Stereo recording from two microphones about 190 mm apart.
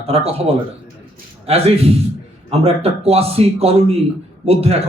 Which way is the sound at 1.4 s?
30° right (ahead or behind).